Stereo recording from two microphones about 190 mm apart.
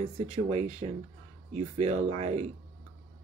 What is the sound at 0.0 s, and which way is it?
Speech, 30° right (ahead or behind).